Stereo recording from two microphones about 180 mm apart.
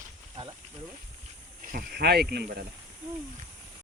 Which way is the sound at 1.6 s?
55° right (ahead or behind).